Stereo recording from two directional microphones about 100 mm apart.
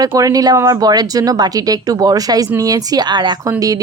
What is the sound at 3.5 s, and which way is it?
Speech, 35° right (ahead or behind).